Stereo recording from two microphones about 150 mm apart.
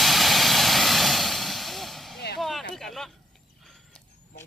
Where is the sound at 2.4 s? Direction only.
Centre (ahead or behind).